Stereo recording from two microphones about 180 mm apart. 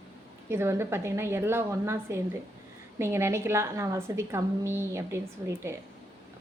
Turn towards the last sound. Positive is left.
turn(degrees=-15)  # may be behind; listen again after turning